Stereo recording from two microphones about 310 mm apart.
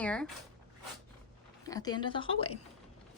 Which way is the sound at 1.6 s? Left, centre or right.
Centre.